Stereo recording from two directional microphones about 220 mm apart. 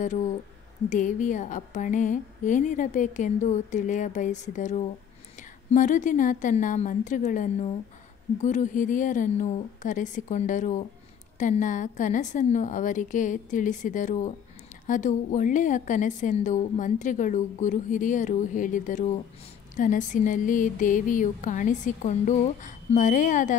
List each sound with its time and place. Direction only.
0.8 s a woman's voice: 35° left (ahead or behind)